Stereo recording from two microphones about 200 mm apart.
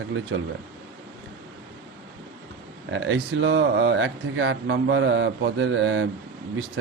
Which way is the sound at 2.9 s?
65° right (ahead or behind).